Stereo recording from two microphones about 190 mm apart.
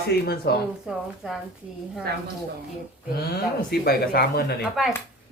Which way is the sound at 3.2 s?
55° left (ahead or behind).